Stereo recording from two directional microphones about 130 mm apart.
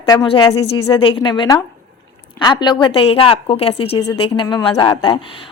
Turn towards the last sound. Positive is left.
turn(degrees=40)  # may be behind; listen again after turning